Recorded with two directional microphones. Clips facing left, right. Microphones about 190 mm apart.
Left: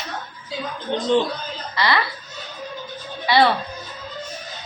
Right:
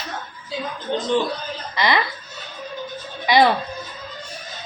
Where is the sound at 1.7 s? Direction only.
20° right (ahead or behind).